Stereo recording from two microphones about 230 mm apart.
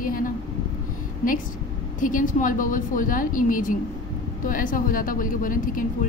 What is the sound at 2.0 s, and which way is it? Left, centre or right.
A woman's voice, left.